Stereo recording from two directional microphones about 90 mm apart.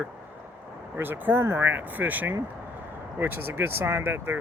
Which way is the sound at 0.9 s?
25° right (ahead or behind).